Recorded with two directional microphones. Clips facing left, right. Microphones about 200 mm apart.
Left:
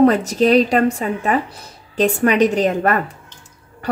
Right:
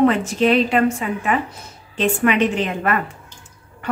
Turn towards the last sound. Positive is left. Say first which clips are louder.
# left 2 dB
turn(degrees=40)  # may be behind; listen again after turning